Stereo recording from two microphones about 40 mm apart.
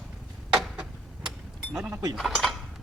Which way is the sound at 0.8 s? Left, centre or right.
Centre.